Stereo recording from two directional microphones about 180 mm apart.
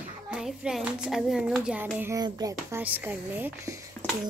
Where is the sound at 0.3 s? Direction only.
5° right (ahead or behind).